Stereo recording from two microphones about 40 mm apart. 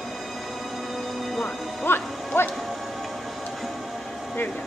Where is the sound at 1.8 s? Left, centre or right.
Left.